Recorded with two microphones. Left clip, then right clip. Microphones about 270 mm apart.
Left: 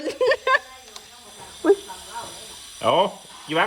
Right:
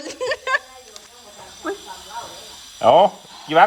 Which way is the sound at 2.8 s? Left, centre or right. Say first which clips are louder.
Right 7 dB; right.